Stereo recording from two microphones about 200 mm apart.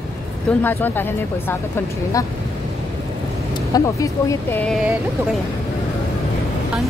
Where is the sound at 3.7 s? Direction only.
15° left (ahead or behind).